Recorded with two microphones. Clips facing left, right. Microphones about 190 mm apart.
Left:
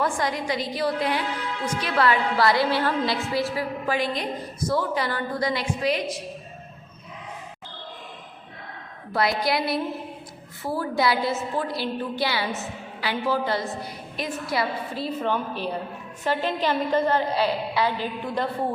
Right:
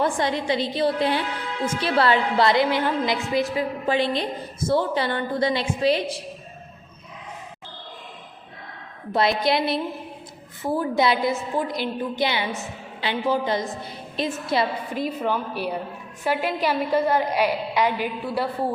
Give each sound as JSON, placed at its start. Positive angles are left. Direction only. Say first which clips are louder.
{"t": 0.0, "sound": "a woman's voice", "louder": "right 2 dB", "side_deg": -25}
{"t": 9.1, "sound": "a woman's voice", "louder": "right 3 dB", "side_deg": -25}